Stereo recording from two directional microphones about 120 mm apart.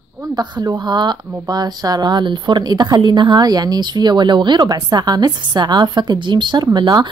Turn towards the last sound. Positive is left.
turn(degrees=-40)  # may be behind; listen again after turning